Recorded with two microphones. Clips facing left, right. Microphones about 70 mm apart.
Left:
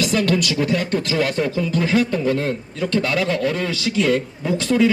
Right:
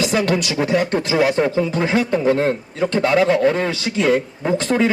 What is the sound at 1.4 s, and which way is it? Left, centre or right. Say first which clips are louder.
A man's voice: right 3 dB; right.